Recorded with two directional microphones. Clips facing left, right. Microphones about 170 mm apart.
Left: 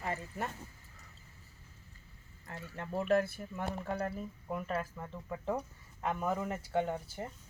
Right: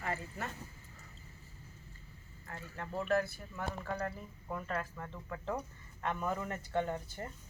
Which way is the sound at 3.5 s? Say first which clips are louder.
Left 2 dB; 20° left (ahead or behind).